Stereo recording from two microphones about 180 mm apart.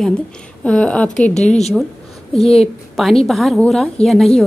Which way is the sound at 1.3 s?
40° left (ahead or behind).